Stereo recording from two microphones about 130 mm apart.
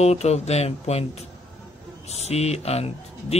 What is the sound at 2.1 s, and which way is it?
Speech, 55° left (ahead or behind).